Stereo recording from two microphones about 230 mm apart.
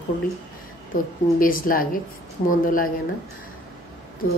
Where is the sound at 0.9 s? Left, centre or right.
Left.